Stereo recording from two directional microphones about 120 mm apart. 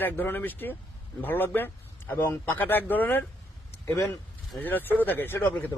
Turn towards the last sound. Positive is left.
turn(degrees=15)  # may be behind; listen again after turning